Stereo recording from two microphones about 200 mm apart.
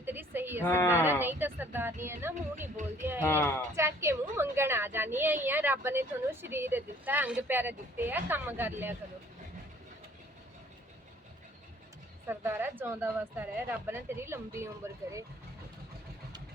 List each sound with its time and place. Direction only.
0.0 s a sound: 10° right (ahead or behind)
0.6 s speech: 10° left (ahead or behind)
1.0 s a woman's voice: 10° right (ahead or behind)
2.3 s speech: 40° right (ahead or behind)
3.2 s speech: 10° left (ahead or behind)
3.8 s a woman's voice: 15° right (ahead or behind)
12.3 s a woman's voice: 10° right (ahead or behind)